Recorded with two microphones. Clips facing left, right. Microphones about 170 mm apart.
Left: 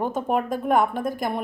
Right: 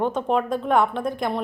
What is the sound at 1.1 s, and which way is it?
Speech, 45° left (ahead or behind).